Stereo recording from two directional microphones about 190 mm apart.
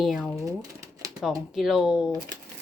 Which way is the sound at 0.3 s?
20° right (ahead or behind).